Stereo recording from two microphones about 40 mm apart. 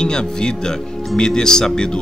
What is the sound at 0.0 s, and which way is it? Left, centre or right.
Speech, centre.